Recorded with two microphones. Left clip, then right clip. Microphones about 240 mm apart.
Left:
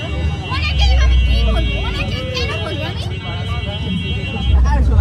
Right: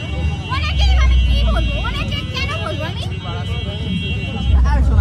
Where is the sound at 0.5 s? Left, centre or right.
Centre.